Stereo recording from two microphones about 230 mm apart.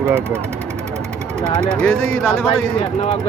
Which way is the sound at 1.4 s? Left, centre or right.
Centre.